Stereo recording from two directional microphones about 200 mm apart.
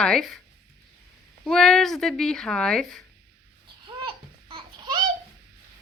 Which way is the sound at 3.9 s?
25° right (ahead or behind).